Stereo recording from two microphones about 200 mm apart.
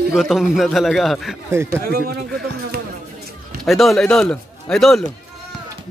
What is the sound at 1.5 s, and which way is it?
Speech, 15° right (ahead or behind).